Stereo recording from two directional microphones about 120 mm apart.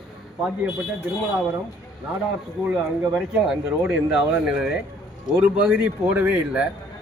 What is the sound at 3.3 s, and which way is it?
Speech, 5° right (ahead or behind).